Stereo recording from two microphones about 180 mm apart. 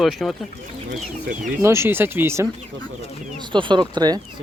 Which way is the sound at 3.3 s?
25° right (ahead or behind).